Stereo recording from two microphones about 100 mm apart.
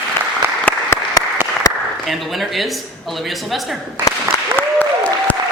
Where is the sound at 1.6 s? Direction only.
40° left (ahead or behind).